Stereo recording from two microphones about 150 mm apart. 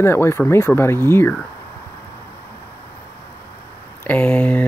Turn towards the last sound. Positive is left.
turn(degrees=10)  # may be behind; listen again after turning